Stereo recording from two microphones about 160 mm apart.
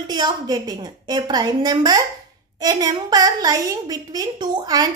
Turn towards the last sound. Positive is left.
turn(degrees=-25)  # may be behind; listen again after turning